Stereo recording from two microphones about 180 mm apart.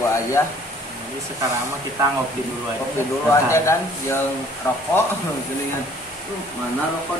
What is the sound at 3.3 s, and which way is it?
Speech, 15° left (ahead or behind).